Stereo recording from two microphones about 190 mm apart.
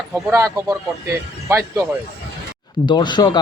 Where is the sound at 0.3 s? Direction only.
15° right (ahead or behind).